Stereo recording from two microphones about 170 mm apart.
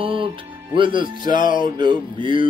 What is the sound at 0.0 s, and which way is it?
Music, 30° right (ahead or behind).